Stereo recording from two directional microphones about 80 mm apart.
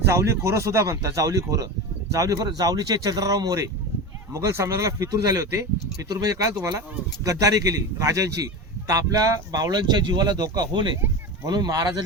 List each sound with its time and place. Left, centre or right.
0.0 s speech: right